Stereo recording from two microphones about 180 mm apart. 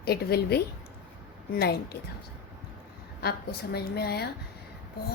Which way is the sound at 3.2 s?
60° left (ahead or behind).